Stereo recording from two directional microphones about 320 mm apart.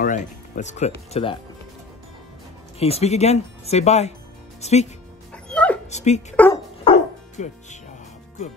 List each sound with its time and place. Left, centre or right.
0.0 s speech: left
2.8 s speech: centre
5.3 s dog: centre
5.9 s speech: left
6.3 s dog: centre
6.9 s music: centre
7.4 s speech: left